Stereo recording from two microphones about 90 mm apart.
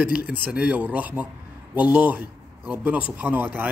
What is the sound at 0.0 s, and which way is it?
A man's voice, 15° right (ahead or behind).